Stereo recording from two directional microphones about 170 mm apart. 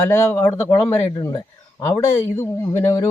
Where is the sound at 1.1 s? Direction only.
25° left (ahead or behind).